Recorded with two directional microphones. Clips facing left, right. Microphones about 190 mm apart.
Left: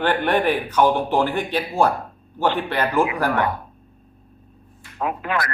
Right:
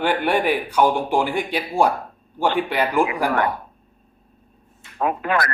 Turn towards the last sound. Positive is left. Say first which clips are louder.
# right 3 dB
turn(degrees=-50)  # may be behind; listen again after turning